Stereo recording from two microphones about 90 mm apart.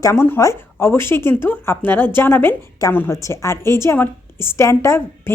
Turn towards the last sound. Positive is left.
turn(degrees=25)  # may be behind; listen again after turning